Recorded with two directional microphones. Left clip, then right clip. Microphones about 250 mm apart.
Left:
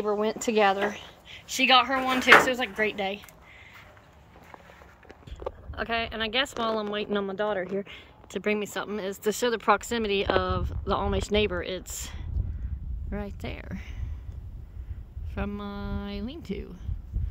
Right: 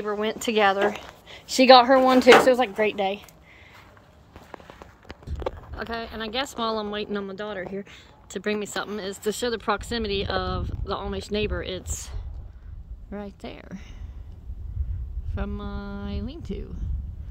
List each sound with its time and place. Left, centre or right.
0.0 s speech: centre
1.6 s a woman's voice: right
2.4 s speech: centre
5.8 s speech: centre
15.3 s a woman's voice: centre